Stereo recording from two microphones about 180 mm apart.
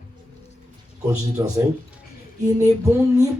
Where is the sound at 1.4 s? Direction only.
20° right (ahead or behind).